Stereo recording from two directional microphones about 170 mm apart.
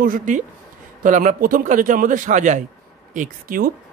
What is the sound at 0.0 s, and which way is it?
Speech, 50° right (ahead or behind).